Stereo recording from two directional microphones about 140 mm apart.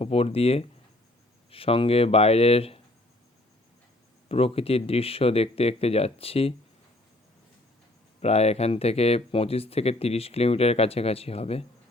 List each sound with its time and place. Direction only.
0.0 s speech: 45° left (ahead or behind)
4.3 s speech: 45° left (ahead or behind)
8.2 s speech: 50° left (ahead or behind)